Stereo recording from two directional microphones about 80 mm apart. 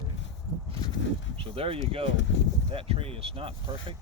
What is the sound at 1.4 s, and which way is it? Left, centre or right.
Speech, right.